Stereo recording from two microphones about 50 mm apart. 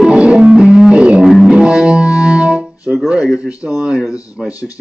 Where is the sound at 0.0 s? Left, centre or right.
Right.